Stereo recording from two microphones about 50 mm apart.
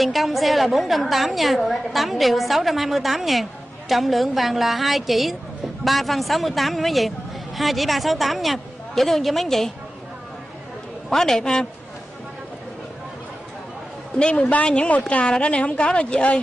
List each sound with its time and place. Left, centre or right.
0.0 s a woman's voice: centre
11.1 s a man's voice: centre
14.1 s a woman's voice: left